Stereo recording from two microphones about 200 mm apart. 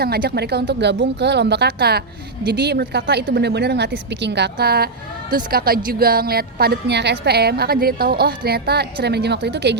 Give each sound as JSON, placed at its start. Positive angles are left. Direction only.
{"t": 0.0, "sound": "a woman's voice", "side_deg": -50}